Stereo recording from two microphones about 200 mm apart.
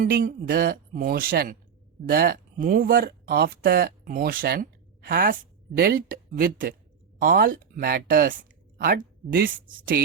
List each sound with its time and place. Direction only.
0.0 s speech: 45° right (ahead or behind)